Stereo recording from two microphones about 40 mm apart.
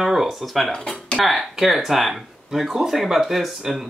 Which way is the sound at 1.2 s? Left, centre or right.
Centre.